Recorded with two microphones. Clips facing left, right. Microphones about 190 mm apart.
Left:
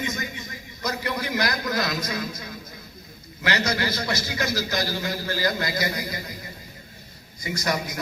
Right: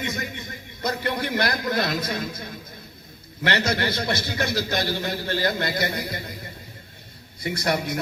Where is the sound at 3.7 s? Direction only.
55° right (ahead or behind).